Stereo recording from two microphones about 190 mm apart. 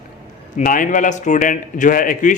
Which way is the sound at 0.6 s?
45° left (ahead or behind).